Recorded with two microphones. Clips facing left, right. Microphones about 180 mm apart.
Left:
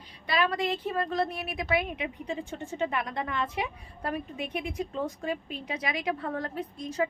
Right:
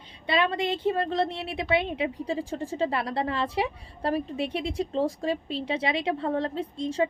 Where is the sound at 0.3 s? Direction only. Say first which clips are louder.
Right 2 dB; 25° right (ahead or behind).